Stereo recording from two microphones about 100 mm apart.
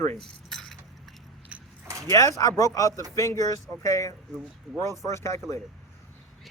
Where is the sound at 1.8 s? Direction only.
35° right (ahead or behind).